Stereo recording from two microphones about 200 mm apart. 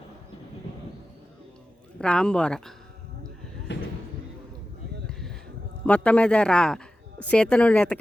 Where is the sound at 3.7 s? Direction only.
60° left (ahead or behind).